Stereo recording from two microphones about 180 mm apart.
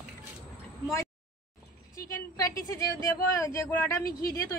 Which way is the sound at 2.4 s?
20° left (ahead or behind).